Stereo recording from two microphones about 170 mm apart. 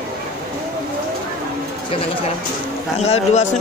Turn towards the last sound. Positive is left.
turn(degrees=45)  # may be behind; listen again after turning